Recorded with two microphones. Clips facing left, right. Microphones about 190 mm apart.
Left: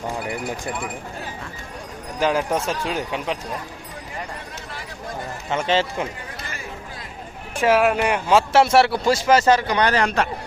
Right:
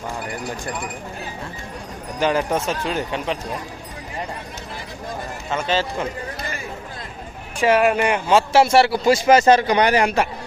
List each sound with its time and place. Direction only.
2.1 s speech: 5° left (ahead or behind)
5.5 s speech: 25° left (ahead or behind)
7.6 s speech: centre (ahead or behind)
9.0 s a man's voice: 15° right (ahead or behind)